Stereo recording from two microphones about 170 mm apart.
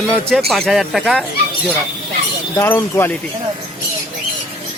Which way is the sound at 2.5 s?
15° left (ahead or behind).